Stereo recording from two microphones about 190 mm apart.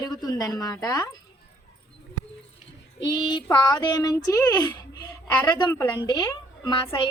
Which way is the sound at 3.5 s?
20° left (ahead or behind).